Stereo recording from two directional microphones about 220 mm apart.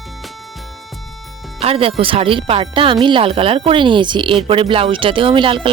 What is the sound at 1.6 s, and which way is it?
Speech, 25° right (ahead or behind).